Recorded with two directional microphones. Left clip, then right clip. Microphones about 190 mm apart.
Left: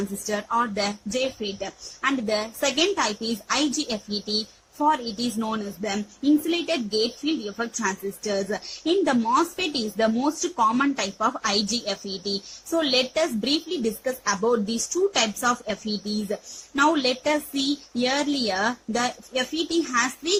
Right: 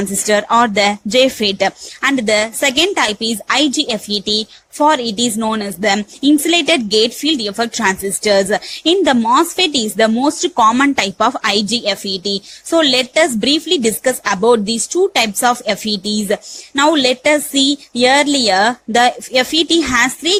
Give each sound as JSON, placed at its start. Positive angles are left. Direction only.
{"t": 0.3, "sound": "speech", "side_deg": -35}